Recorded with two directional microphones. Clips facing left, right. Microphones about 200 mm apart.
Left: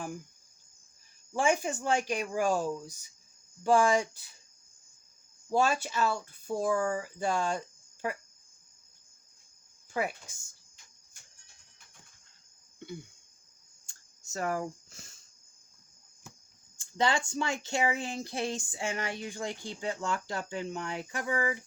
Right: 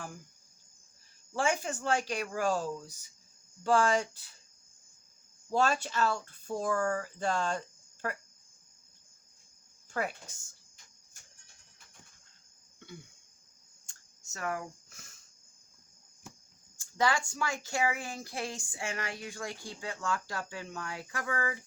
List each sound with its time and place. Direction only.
1.3 s speech: 15° left (ahead or behind)
5.5 s speech: 10° left (ahead or behind)
9.9 s speech: 10° left (ahead or behind)
14.3 s speech: 30° left (ahead or behind)
17.0 s speech: 25° left (ahead or behind)